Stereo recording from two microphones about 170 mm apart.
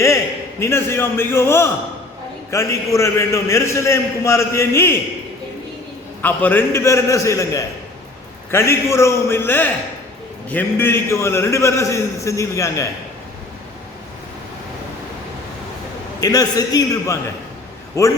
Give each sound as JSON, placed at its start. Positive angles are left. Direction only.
{"t": 0.6, "sound": "a man's voice", "side_deg": 15}
{"t": 6.2, "sound": "a man's voice", "side_deg": 10}
{"t": 16.2, "sound": "a man's voice", "side_deg": 20}